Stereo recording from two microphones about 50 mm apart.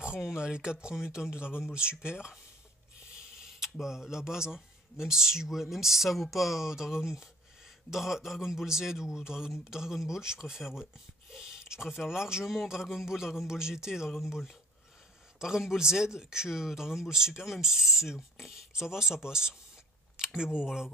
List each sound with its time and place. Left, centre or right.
0.0 s speech: centre
3.3 s a sound: centre
3.8 s speech: centre